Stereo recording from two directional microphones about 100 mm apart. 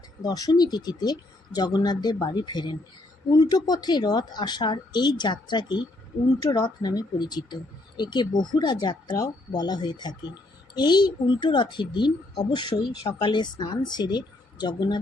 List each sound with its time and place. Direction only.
0.2 s speech: 40° left (ahead or behind)